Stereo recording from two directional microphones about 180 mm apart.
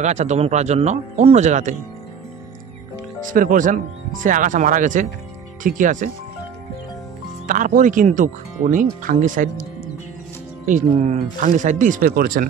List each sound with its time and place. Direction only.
0.0 s speech: 40° right (ahead or behind)
3.3 s speech: 50° right (ahead or behind)
7.4 s speech: 45° right (ahead or behind)
10.6 s speech: 45° right (ahead or behind)